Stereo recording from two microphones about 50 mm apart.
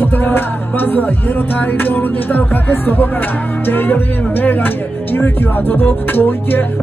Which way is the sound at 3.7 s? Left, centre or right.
Left.